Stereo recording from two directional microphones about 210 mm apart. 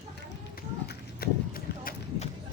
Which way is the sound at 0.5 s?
45° left (ahead or behind).